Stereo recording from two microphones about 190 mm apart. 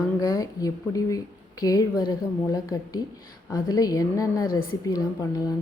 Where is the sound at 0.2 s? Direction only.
15° left (ahead or behind).